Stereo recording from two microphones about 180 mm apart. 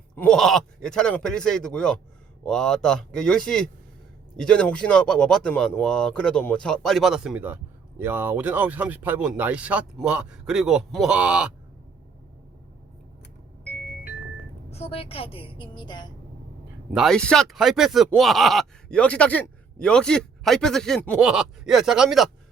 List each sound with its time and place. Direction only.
0.2 s speech: 5° left (ahead or behind)
14.7 s a woman's voice: 35° left (ahead or behind)
16.9 s speech: centre (ahead or behind)